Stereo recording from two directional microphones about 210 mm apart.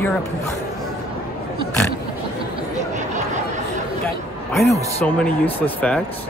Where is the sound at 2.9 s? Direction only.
35° right (ahead or behind).